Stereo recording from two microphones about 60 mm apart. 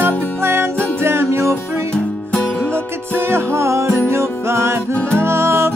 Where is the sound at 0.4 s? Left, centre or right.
Right.